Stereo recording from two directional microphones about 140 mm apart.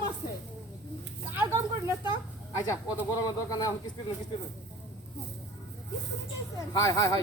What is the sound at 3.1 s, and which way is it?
Speech, 30° left (ahead or behind).